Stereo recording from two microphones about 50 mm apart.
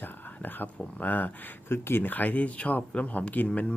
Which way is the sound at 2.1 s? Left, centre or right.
Left.